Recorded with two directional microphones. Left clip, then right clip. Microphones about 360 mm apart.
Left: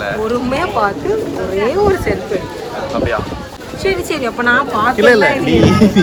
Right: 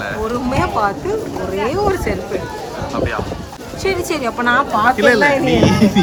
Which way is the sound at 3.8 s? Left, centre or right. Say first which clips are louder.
Left 2 dB; centre.